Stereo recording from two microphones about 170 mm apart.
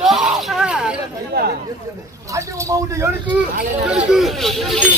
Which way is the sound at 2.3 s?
20° right (ahead or behind).